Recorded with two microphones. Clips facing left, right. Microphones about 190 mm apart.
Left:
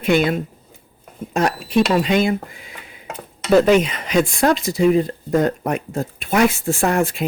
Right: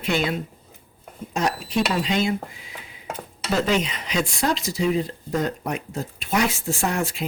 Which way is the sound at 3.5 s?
55° left (ahead or behind).